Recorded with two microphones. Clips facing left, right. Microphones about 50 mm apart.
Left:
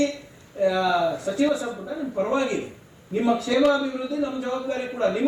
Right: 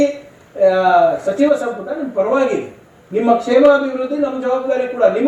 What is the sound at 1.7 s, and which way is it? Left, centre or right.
Speech, right.